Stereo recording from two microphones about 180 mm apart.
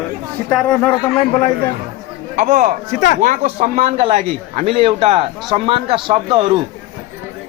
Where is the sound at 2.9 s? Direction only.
45° left (ahead or behind).